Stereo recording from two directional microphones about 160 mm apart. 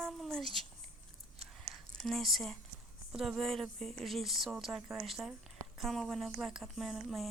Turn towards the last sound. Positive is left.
turn(degrees=0)  # may be behind; listen again after turning